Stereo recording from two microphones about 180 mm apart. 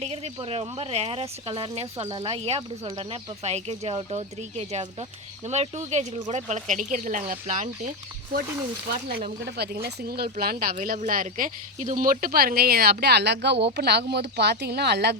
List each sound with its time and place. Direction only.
0.0 s speech: 35° right (ahead or behind)
9.0 s speech: 60° right (ahead or behind)
12.2 s speech: 55° right (ahead or behind)